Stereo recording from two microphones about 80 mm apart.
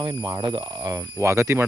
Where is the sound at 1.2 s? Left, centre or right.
Right.